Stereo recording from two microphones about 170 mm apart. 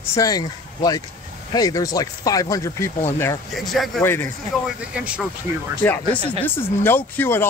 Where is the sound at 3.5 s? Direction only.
Centre (ahead or behind).